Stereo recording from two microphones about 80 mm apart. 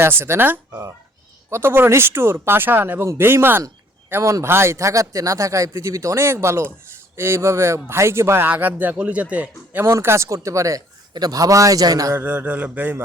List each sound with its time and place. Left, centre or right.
0.0 s a man's voice: right
4.2 s a man's voice: right
4.4 s a man's voice: right
9.8 s speech: right
11.1 s a man's voice: right
12.1 s a man's voice: right